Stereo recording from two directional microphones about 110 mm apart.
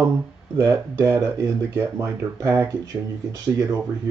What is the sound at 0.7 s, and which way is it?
Speech, 25° right (ahead or behind).